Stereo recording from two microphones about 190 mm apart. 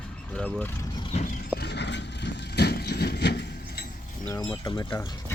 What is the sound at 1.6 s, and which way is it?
Vehicle, 65° left (ahead or behind).